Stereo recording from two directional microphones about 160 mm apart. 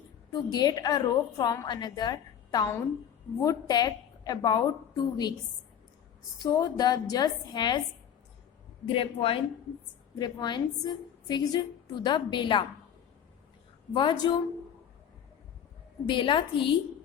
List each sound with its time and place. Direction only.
0.5 s a woman's voice: 25° left (ahead or behind)
6.4 s a woman's voice: 20° left (ahead or behind)
8.9 s a woman's voice: 35° left (ahead or behind)
13.9 s a woman's voice: 30° left (ahead or behind)
16.0 s a woman's voice: 30° left (ahead or behind)